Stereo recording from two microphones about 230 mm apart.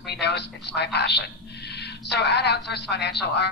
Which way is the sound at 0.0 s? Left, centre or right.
Left.